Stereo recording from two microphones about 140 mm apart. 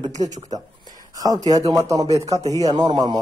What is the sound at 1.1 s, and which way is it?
Speech, 25° right (ahead or behind).